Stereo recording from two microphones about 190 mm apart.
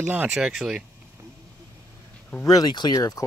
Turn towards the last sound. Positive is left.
turn(degrees=20)  # may be behind; listen again after turning